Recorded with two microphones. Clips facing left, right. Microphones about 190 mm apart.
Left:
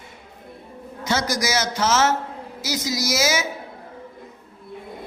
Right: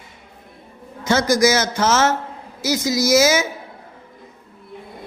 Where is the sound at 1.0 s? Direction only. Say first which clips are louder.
Right 8 dB; 50° right (ahead or behind).